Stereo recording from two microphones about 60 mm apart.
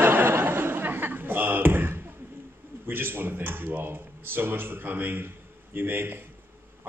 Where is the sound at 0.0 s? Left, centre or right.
Right.